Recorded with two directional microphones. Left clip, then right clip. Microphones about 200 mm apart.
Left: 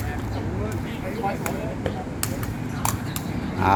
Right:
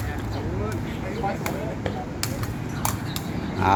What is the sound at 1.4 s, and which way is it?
Vehicle, 55° left (ahead or behind).